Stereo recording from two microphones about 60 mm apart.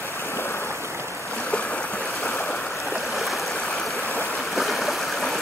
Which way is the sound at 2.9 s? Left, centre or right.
Centre.